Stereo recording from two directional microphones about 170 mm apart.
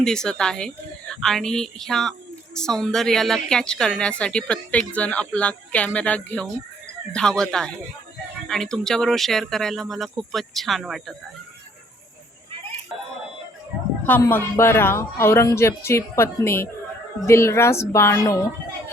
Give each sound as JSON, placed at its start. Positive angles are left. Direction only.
{"t": 0.0, "sound": "speech", "side_deg": 5}
{"t": 14.0, "sound": "speech", "side_deg": 10}